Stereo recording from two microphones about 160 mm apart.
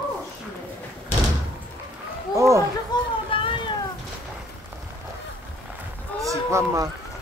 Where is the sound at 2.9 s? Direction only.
25° left (ahead or behind).